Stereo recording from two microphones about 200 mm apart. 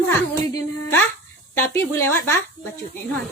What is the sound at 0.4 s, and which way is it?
A woman's voice, 15° left (ahead or behind).